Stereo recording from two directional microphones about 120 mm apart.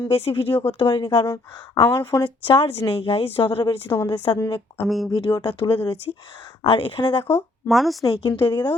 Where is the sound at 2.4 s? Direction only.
50° left (ahead or behind).